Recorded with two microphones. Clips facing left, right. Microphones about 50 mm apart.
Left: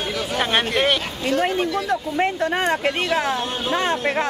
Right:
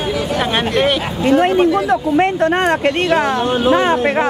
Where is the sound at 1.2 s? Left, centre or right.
Centre.